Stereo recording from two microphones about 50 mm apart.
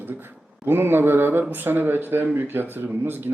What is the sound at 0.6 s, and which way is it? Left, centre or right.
A man's voice, right.